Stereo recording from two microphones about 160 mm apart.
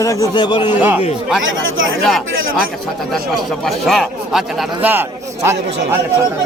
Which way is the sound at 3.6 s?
Centre (ahead or behind).